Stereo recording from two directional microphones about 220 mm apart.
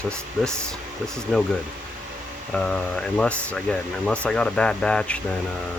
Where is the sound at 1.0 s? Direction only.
Centre (ahead or behind).